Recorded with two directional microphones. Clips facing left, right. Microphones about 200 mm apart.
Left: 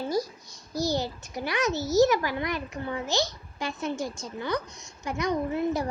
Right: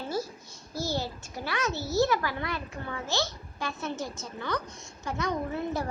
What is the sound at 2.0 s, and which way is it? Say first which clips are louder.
A woman's voice: left 4 dB; 15° left (ahead or behind).